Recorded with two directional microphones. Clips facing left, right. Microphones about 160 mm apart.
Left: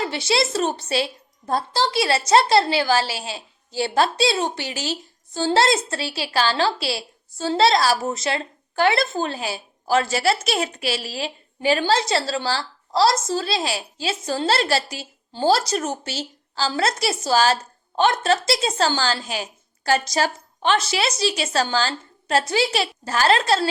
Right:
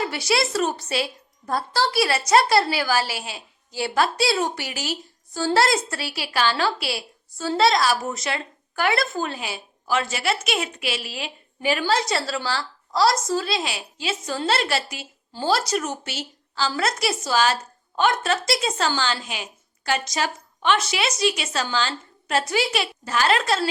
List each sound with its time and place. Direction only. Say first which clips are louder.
0.0 s a woman's voice: left 1 dB; 25° left (ahead or behind)